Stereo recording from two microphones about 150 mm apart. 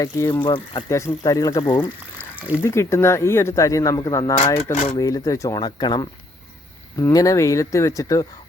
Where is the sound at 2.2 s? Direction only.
10° right (ahead or behind).